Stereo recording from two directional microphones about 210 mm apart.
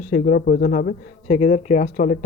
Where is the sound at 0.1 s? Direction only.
40° left (ahead or behind).